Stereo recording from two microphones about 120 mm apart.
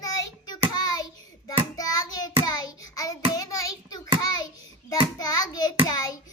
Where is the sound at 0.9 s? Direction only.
30° left (ahead or behind).